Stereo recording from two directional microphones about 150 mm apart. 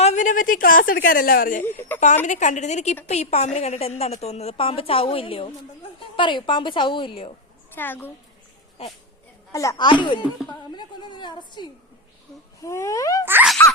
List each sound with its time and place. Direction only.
0.0 s a woman's voice: 50° left (ahead or behind); by 1.6 s 70° left (ahead or behind)
2.2 s a woman's voice: 55° left (ahead or behind); by 7.3 s 35° left (ahead or behind)
7.8 s a child's voice: 15° left (ahead or behind)
9.5 s a woman's voice: 20° left (ahead or behind)
12.6 s a woman's voice: 20° left (ahead or behind)
13.2 s sneeze: 15° right (ahead or behind)